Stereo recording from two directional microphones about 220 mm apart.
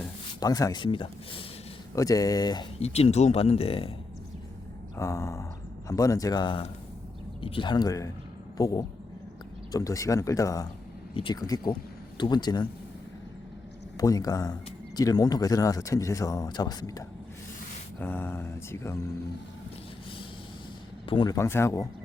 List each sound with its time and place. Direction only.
0.3 s speech: 15° left (ahead or behind)
4.9 s speech: 15° left (ahead or behind)
13.9 s speech: 15° left (ahead or behind)
18.0 s speech: 10° left (ahead or behind)
21.1 s speech: 20° left (ahead or behind)